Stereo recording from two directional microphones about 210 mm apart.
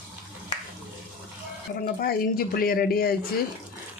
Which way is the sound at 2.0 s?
45° left (ahead or behind).